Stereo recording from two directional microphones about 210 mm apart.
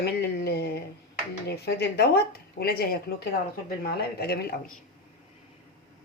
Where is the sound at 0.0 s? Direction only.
50° left (ahead or behind).